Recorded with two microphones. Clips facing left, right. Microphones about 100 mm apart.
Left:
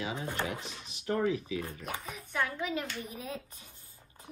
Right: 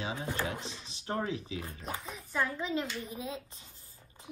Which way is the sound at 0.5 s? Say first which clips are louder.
Even; 30° right (ahead or behind).